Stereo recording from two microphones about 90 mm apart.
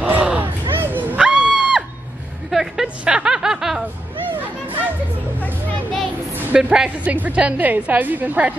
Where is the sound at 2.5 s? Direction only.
5° right (ahead or behind).